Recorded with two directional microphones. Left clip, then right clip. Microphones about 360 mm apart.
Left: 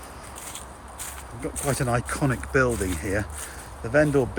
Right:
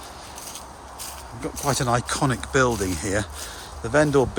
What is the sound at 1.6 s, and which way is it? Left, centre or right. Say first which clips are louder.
Speech: right 3 dB; centre.